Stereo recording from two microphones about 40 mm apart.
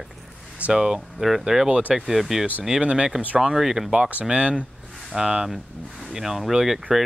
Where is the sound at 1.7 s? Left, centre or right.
Right.